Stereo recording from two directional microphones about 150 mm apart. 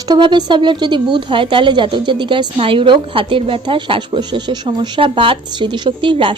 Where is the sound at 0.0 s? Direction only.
30° right (ahead or behind).